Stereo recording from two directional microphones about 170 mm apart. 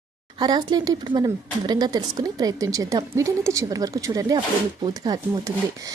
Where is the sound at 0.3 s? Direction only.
25° right (ahead or behind).